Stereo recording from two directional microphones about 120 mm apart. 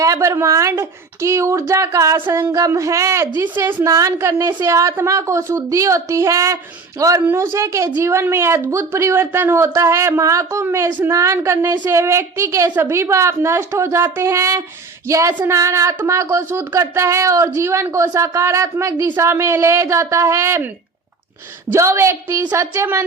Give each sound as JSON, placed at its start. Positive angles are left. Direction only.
{"t": 0.0, "sound": "speech", "side_deg": -25}
{"t": 3.8, "sound": "speech", "side_deg": -30}
{"t": 21.7, "sound": "speech", "side_deg": -25}